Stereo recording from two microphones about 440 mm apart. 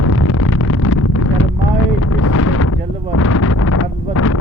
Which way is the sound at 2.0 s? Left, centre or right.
Left.